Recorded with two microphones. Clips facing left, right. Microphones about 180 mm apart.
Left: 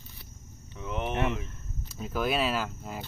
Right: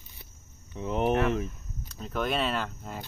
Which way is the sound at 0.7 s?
35° right (ahead or behind).